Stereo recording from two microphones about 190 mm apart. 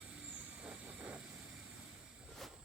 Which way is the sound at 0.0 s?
5° right (ahead or behind).